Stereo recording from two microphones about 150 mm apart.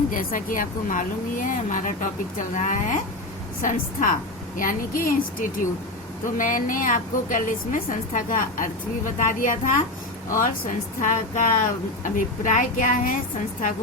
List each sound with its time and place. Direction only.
0.1 s a woman's voice: 65° left (ahead or behind)